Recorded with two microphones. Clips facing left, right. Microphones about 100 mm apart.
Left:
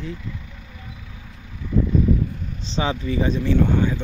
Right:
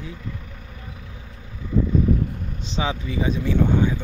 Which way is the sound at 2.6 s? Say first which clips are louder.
Left 2 dB; 5° right (ahead or behind).